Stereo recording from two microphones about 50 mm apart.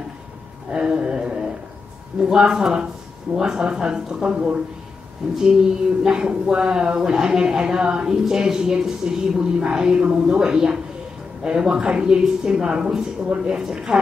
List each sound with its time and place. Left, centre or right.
0.7 s speech: centre